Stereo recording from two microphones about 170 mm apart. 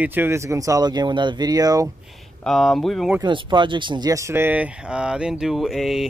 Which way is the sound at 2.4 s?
Centre (ahead or behind).